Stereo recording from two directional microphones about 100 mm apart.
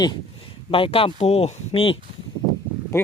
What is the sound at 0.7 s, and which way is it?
Speech, 65° left (ahead or behind).